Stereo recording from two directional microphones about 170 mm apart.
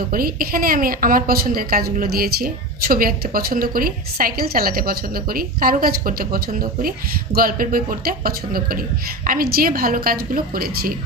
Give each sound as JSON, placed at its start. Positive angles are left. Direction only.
{"t": 0.1, "sound": "a woman's voice", "side_deg": -60}